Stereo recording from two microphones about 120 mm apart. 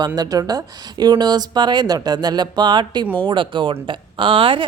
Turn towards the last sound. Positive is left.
turn(degrees=-45)  # may be behind; listen again after turning